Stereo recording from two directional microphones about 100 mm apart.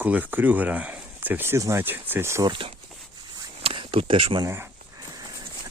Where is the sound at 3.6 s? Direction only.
70° right (ahead or behind).